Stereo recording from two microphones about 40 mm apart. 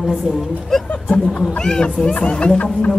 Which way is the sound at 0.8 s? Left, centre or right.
Left.